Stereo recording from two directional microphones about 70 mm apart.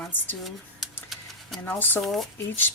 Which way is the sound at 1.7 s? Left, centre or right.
Left.